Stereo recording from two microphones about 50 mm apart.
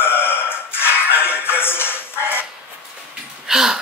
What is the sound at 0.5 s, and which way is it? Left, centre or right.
Music, left.